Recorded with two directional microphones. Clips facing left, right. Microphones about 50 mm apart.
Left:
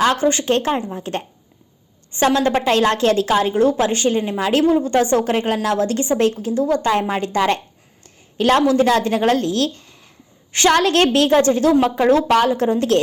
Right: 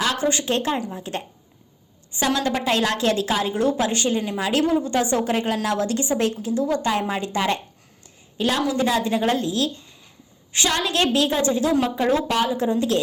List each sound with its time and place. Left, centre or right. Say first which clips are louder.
0.0 s a woman's voice: left 6 dB; left
8.0 s a sound: left 6 dB; left
8.9 s a woman's voice: left 5 dB; left
10.5 s a woman's voice: left 8 dB; left